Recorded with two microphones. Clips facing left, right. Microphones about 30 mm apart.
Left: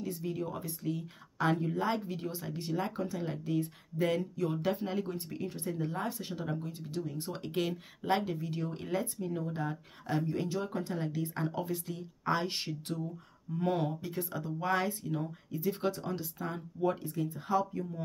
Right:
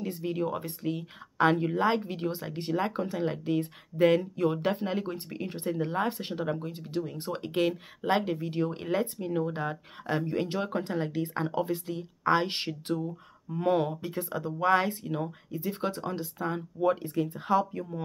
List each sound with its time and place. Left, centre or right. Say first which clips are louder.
0.0 s speech: right 5 dB; right
7.2 s speech: right 7 dB; centre
10.3 s speech: right 4 dB; right
15.5 s speech: even; centre
17.0 s speech: right 5 dB; right